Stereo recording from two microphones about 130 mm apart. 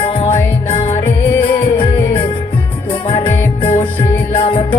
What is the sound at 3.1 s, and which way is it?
Music, 45° left (ahead or behind).